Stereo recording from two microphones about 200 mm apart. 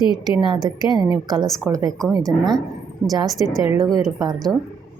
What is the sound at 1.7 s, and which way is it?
Speech, 10° right (ahead or behind).